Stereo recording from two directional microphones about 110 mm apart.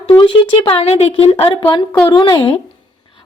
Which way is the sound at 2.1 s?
45° left (ahead or behind).